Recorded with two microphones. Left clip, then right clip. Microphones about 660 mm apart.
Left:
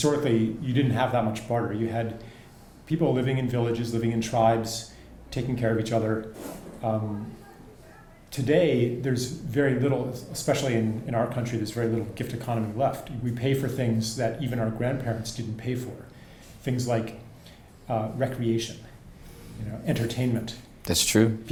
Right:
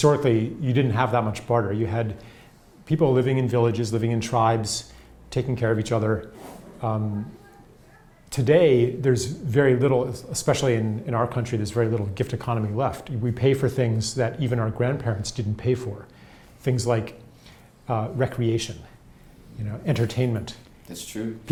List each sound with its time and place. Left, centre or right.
0.0 s speech: right
8.3 s speech: right
19.8 s speech: right
20.8 s speech: left